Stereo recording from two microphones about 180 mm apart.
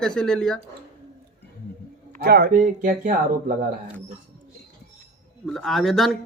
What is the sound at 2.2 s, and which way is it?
Speech, 60° right (ahead or behind).